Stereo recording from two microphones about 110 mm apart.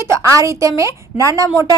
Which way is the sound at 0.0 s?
25° right (ahead or behind).